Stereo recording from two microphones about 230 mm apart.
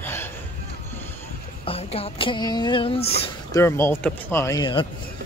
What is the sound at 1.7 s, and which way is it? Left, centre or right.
Speech, left.